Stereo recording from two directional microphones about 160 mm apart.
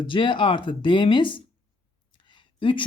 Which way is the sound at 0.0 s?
30° left (ahead or behind).